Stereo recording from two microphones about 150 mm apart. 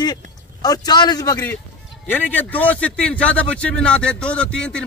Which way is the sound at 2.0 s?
10° left (ahead or behind).